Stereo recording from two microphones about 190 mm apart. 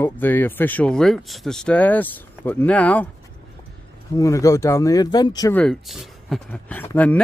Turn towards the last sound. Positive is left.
turn(degrees=10)  # may be behind; listen again after turning